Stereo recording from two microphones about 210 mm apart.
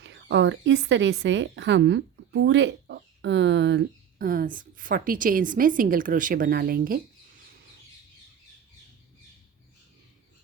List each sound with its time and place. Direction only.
0.0 s a woman's voice: 60° right (ahead or behind)